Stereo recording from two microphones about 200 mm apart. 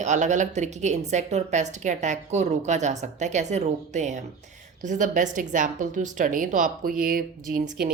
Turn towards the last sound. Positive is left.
turn(degrees=-45)  # may be behind; listen again after turning